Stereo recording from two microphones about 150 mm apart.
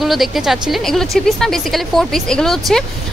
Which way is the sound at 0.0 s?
Centre (ahead or behind).